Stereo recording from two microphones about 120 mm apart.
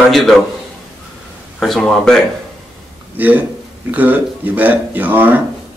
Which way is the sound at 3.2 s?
15° right (ahead or behind).